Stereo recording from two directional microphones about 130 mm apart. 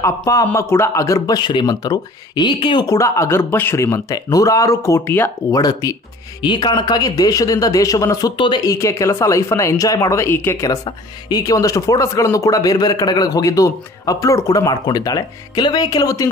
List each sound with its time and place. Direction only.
0.0 s speech: 25° left (ahead or behind)
2.9 s speech: 25° left (ahead or behind)
5.6 s speech: 30° left (ahead or behind)